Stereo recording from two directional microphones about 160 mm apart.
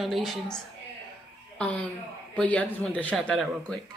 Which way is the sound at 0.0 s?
Centre (ahead or behind).